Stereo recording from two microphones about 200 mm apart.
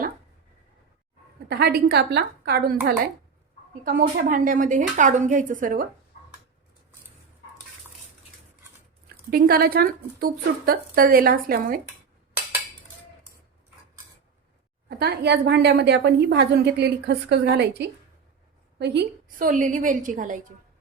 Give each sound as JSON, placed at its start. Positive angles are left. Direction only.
{"t": 1.5, "sound": "a woman's voice", "side_deg": -50}
{"t": 9.3, "sound": "a woman's voice", "side_deg": -50}
{"t": 14.8, "sound": "a woman's voice", "side_deg": -55}